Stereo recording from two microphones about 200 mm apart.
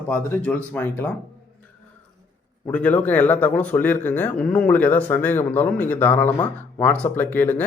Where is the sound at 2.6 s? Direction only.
5° left (ahead or behind).